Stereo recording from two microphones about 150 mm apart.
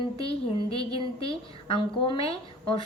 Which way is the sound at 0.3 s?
40° left (ahead or behind).